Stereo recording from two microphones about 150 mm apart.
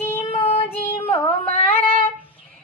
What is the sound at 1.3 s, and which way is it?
Humming, 45° left (ahead or behind).